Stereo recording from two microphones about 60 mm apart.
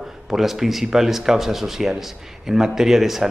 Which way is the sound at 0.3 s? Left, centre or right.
Centre.